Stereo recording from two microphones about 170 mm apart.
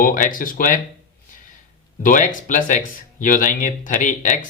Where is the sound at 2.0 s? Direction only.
50° left (ahead or behind).